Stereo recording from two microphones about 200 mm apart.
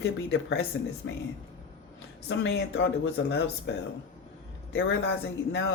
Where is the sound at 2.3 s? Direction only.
65° left (ahead or behind).